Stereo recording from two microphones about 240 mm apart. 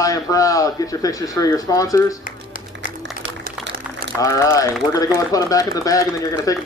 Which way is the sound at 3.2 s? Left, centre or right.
Right.